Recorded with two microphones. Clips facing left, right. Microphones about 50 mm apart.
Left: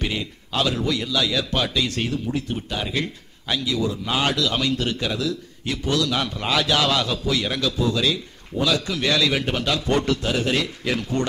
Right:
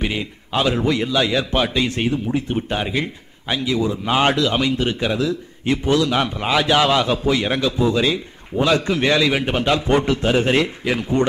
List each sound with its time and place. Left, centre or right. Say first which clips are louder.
0.0 s a man's voice: right 3 dB; right
10.8 s a man's voice: right 5 dB; centre